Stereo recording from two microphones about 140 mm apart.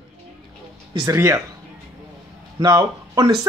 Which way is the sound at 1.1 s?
20° right (ahead or behind).